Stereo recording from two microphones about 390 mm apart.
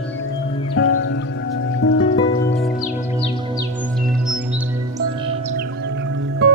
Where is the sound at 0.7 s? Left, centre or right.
Left.